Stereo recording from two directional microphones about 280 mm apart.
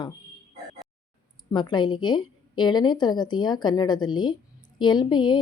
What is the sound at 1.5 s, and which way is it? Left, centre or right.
Speech, centre.